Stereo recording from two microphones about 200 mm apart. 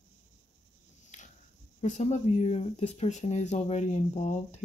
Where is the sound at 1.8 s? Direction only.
35° left (ahead or behind).